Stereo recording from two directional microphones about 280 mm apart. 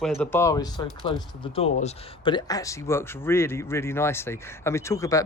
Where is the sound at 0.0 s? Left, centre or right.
Centre.